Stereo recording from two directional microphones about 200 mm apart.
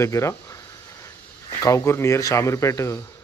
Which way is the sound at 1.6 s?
15° left (ahead or behind).